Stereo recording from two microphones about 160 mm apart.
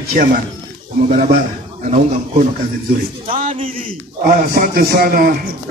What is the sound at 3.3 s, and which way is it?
Speech, 60° right (ahead or behind).